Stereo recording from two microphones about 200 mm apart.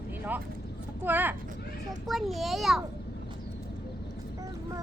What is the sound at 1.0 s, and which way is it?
A child's voice, 10° right (ahead or behind).